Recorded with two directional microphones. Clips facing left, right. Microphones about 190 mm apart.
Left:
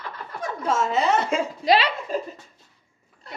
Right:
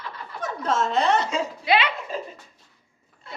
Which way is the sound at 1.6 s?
35° left (ahead or behind).